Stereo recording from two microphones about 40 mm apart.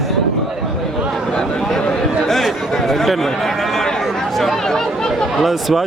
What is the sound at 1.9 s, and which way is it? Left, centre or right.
Chatter, centre.